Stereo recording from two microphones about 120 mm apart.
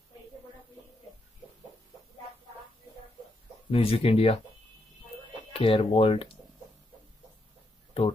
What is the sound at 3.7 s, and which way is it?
Speech, 55° left (ahead or behind).